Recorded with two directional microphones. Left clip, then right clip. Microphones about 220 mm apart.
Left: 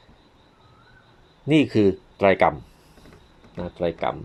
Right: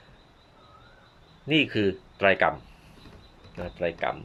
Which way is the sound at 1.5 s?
25° left (ahead or behind).